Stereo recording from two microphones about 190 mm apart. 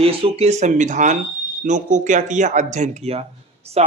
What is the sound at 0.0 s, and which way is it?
Speech, 30° right (ahead or behind).